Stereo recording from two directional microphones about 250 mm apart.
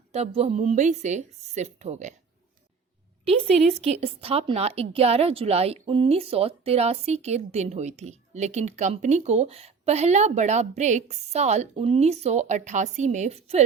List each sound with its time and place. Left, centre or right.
0.1 s a woman's voice: right
3.2 s a woman's voice: right